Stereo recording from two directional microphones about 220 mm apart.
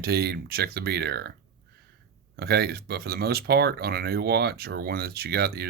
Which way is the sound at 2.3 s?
45° right (ahead or behind).